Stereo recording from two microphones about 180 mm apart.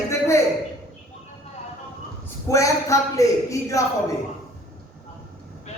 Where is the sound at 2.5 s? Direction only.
15° left (ahead or behind).